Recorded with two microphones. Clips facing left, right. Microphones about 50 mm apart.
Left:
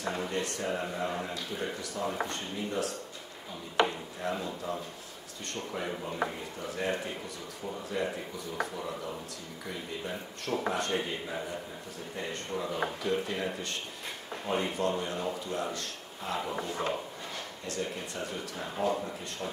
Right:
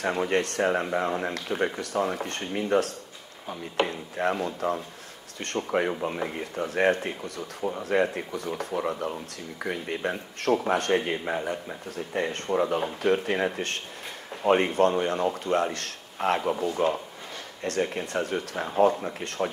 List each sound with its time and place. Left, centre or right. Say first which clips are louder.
0.0 s speech: right 7 dB; right
1.0 s speech: right 6 dB; right
1.3 s speech: right 7 dB; right